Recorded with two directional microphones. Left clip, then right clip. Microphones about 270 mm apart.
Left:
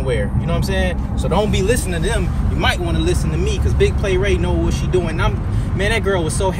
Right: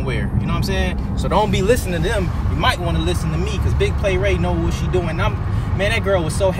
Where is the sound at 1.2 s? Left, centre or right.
Right.